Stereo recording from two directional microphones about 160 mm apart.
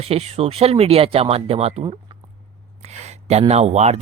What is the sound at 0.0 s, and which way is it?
Speech, 40° right (ahead or behind).